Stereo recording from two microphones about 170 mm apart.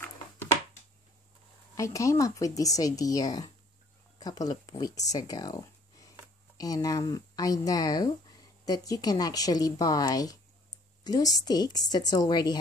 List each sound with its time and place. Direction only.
1.8 s speech: 20° left (ahead or behind)